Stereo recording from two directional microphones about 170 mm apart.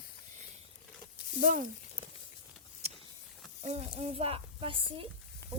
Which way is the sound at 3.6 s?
40° right (ahead or behind).